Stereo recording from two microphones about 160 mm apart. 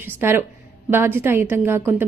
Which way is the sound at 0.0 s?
15° right (ahead or behind).